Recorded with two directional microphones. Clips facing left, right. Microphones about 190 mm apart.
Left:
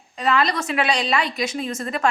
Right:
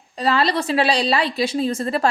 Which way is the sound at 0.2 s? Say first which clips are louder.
Right 2 dB; 30° right (ahead or behind).